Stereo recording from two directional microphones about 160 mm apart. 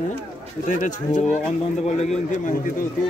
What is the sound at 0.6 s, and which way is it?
Speech, 50° left (ahead or behind).